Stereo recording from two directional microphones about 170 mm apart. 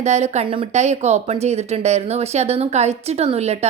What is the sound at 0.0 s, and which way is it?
Speech, 40° right (ahead or behind).